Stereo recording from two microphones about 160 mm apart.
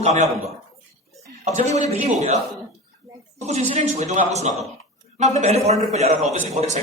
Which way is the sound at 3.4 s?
45° right (ahead or behind).